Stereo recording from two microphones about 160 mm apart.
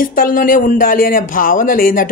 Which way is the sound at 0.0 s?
60° left (ahead or behind).